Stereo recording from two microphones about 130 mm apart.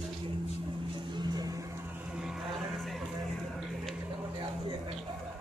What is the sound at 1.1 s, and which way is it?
Vehicle, 30° right (ahead or behind).